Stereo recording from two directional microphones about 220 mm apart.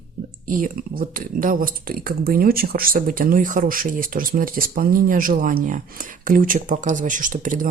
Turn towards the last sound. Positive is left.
turn(degrees=-35)  # may be behind; listen again after turning